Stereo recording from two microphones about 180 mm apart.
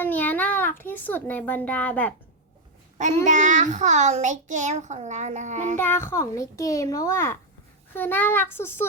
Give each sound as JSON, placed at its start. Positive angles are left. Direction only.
{"t": 0.0, "sound": "a child's voice", "side_deg": 10}
{"t": 3.2, "sound": "a child's voice", "side_deg": -45}
{"t": 5.7, "sound": "a child's voice", "side_deg": 10}